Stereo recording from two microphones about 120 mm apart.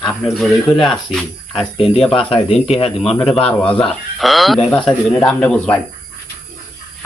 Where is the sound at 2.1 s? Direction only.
50° left (ahead or behind).